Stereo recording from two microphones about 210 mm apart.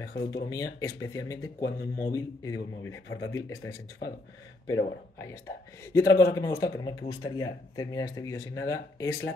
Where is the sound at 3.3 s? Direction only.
15° left (ahead or behind).